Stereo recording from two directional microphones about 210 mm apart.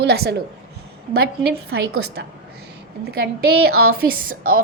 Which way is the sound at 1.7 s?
50° right (ahead or behind).